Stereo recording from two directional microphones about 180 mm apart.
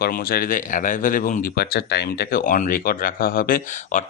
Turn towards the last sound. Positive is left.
turn(degrees=50)  # may be behind; listen again after turning